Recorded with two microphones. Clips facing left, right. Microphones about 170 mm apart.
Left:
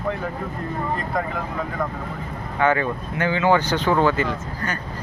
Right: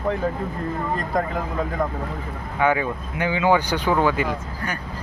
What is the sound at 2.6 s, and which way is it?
Speech, 10° right (ahead or behind).